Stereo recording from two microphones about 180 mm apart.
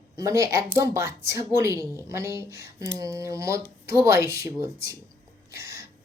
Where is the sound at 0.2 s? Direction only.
15° right (ahead or behind).